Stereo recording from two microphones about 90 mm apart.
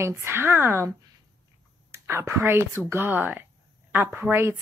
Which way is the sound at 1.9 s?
30° right (ahead or behind).